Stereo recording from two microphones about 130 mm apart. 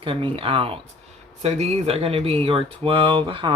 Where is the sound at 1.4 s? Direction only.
55° right (ahead or behind).